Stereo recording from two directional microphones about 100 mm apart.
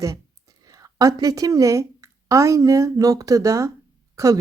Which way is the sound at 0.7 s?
35° right (ahead or behind).